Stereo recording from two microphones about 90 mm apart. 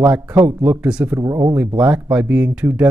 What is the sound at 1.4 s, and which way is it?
Speech, 15° right (ahead or behind).